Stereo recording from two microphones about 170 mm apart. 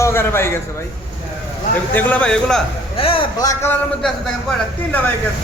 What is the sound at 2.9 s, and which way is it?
Speech, 35° left (ahead or behind).